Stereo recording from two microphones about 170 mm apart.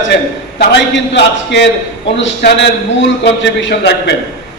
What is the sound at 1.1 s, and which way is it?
Speech, 90° left.